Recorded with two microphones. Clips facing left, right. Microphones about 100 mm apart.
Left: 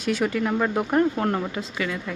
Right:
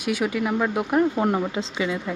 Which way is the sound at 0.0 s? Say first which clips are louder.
Even; 10° right (ahead or behind).